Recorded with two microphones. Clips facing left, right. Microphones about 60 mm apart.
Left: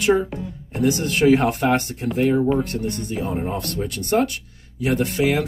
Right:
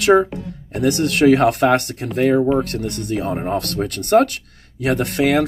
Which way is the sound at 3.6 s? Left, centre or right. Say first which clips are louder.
Right 4 dB; right.